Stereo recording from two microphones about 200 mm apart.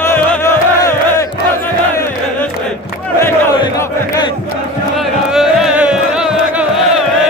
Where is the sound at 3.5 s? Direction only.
20° left (ahead or behind).